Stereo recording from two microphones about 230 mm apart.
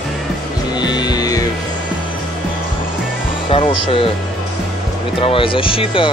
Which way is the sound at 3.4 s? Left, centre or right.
Left.